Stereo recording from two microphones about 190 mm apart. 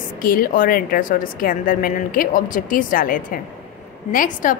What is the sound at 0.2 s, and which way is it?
A woman's voice, 50° left (ahead or behind).